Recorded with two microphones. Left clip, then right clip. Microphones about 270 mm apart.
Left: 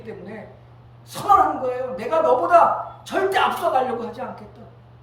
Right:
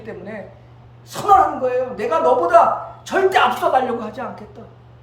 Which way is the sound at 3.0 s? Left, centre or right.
Centre.